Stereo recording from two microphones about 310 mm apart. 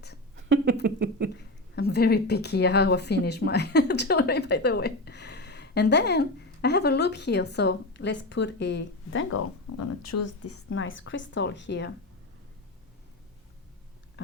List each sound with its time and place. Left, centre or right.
0.3 s a sound: right
1.4 s a woman's voice: left
9.7 s a woman's voice: left